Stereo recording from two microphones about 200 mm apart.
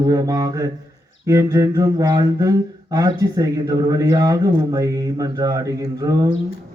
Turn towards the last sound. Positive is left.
turn(degrees=-20)  # may be behind; listen again after turning